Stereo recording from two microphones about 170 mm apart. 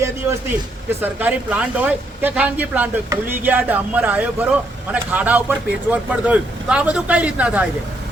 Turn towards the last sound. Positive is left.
turn(degrees=-10)  # may be behind; listen again after turning